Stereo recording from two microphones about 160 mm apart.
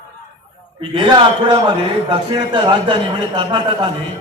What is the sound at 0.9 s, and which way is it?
A man's voice, 30° right (ahead or behind).